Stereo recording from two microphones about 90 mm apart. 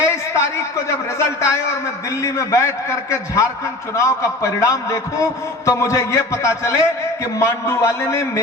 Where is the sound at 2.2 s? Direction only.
35° left (ahead or behind).